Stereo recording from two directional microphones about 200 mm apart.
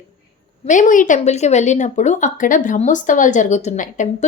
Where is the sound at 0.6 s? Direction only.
40° left (ahead or behind).